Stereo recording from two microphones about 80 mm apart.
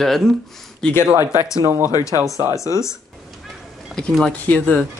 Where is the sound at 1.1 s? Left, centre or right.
Right.